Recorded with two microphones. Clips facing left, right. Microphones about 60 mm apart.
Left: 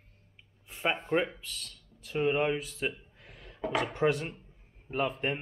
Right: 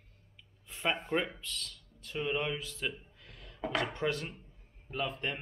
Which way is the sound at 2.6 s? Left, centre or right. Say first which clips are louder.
Left 3 dB; left.